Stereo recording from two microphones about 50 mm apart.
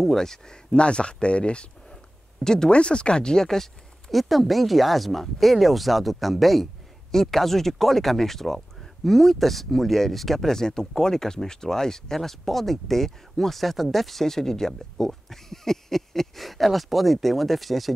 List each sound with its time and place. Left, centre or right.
0.0 s speech: centre
0.7 s speech: left; by 17.9 s centre